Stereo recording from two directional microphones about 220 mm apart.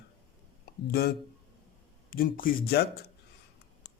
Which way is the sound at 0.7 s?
45° left (ahead or behind).